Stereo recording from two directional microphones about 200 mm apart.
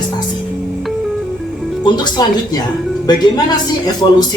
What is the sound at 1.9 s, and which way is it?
Speech, 20° left (ahead or behind).